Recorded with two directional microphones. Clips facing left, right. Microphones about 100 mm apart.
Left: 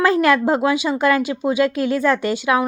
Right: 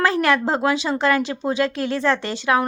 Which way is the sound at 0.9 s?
25° right (ahead or behind).